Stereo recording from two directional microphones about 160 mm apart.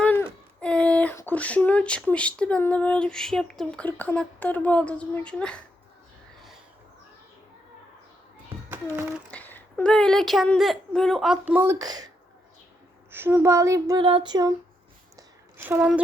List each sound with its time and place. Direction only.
0.0 s speech: 10° left (ahead or behind)
8.7 s a child's voice: 15° right (ahead or behind)
9.3 s a woman's voice: 10° left (ahead or behind); by 11.9 s 20° right (ahead or behind)
13.1 s child singing: 15° right (ahead or behind)
15.1 s a sound: 15° right (ahead or behind)